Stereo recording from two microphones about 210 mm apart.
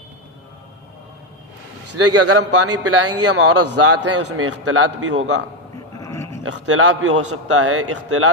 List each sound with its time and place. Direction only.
2.0 s a man's voice: 90° right
6.0 s a sound: 15° left (ahead or behind)
6.4 s a man's voice: 90° right